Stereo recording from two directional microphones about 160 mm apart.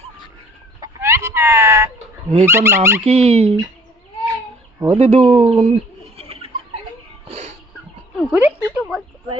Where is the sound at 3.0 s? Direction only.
40° right (ahead or behind).